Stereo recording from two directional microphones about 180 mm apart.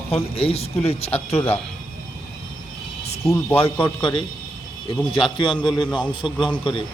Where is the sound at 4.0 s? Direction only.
25° left (ahead or behind).